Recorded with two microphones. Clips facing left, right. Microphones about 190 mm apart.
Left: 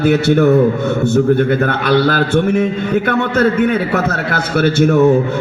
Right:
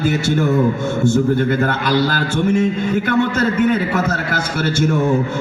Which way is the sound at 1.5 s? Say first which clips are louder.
Left 3 dB; 60° left (ahead or behind).